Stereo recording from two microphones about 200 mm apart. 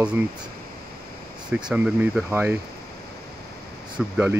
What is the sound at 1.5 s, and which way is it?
Speech, 5° right (ahead or behind).